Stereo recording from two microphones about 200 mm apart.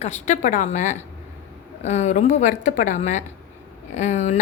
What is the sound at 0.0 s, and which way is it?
A woman's voice, 35° left (ahead or behind).